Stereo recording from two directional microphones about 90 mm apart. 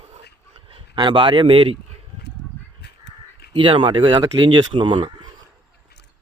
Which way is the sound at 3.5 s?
70° right (ahead or behind).